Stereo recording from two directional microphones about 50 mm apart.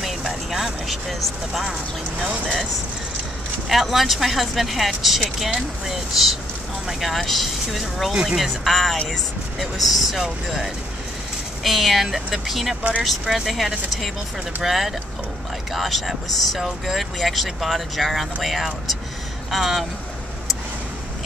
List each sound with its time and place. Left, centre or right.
0.0 s speech: centre
3.6 s speech: centre
8.1 s speech: centre
8.4 s speech: centre